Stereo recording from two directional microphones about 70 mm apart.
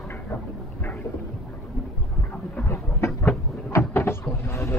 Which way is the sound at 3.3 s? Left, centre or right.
Left.